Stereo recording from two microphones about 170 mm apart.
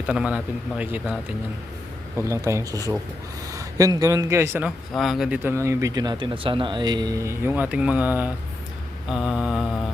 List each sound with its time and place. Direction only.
0.1 s speech: 5° right (ahead or behind)
4.9 s speech: centre (ahead or behind)
9.0 s mantra: 5° right (ahead or behind)